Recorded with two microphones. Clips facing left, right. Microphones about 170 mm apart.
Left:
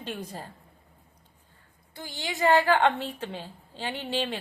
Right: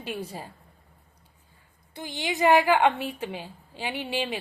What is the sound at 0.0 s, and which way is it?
Speech, 10° right (ahead or behind).